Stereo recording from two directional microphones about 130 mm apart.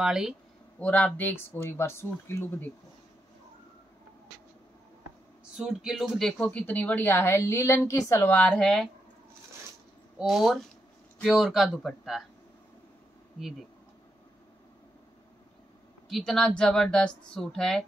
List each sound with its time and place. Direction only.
0.0 s a woman's voice: 5° right (ahead or behind)
0.7 s speech: 10° left (ahead or behind)
5.4 s speech: 5° right (ahead or behind); by 8.4 s 20° left (ahead or behind)
8.4 s speech: 5° left (ahead or behind)
10.1 s a woman's voice: centre (ahead or behind)
16.1 s a woman's voice: centre (ahead or behind)